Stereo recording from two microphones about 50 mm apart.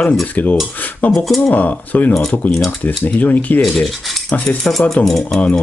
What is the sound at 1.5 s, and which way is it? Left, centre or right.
Speech, left.